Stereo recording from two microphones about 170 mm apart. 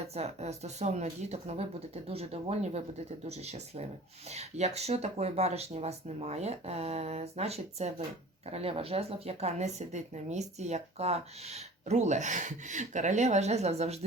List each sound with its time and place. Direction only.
0.1 s speech: 40° right (ahead or behind)